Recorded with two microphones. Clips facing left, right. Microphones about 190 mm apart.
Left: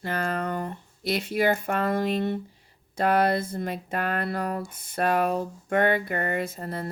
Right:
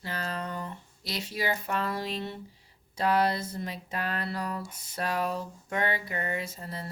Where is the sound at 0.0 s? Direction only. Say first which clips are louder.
Left 7 dB; 55° left (ahead or behind).